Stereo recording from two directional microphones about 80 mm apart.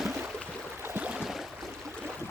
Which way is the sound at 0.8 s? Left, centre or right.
Right.